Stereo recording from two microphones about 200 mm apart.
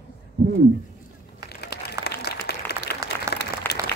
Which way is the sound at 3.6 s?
10° left (ahead or behind).